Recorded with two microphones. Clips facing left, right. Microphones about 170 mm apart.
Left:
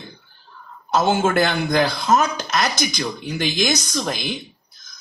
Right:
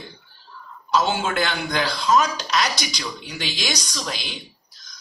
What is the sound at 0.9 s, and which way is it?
A woman's voice, 50° left (ahead or behind).